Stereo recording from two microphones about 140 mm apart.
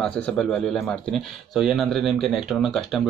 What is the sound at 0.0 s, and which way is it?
Speech, 10° left (ahead or behind).